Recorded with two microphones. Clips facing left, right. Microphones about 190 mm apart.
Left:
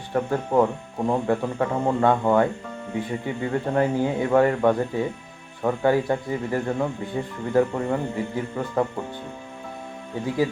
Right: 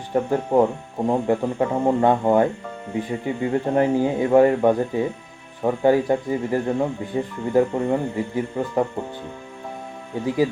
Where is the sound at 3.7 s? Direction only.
20° right (ahead or behind).